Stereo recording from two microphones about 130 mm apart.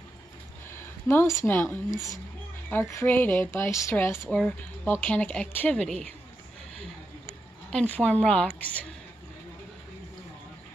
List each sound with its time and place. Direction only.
0.7 s a woman's voice: 20° left (ahead or behind)
4.3 s speech: 10° left (ahead or behind)
7.7 s speech: 10° left (ahead or behind)